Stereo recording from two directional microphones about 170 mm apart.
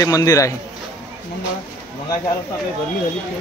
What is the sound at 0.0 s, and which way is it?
Speech, 20° left (ahead or behind).